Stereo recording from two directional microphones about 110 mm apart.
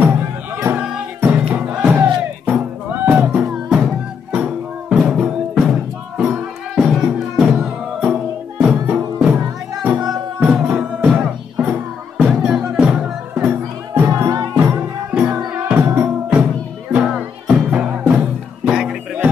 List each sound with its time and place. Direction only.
0.0 s music: 15° right (ahead or behind)
10.4 s music: 10° right (ahead or behind)
13.9 s music: 25° right (ahead or behind)
14.6 s music: 15° right (ahead or behind)
18.7 s music: 5° right (ahead or behind)